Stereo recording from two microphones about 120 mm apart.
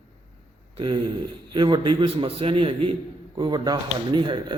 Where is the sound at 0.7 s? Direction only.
40° right (ahead or behind).